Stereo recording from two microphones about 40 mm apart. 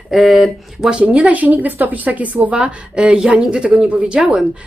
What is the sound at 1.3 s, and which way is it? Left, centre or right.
Speech, right.